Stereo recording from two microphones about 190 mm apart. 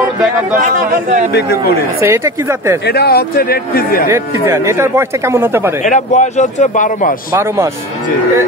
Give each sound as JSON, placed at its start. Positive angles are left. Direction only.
{"t": 0.6, "sound": "speech", "side_deg": -45}
{"t": 2.0, "sound": "speech", "side_deg": -15}
{"t": 2.9, "sound": "speech", "side_deg": 60}
{"t": 4.1, "sound": "speech", "side_deg": -15}
{"t": 5.9, "sound": "a man's voice", "side_deg": 40}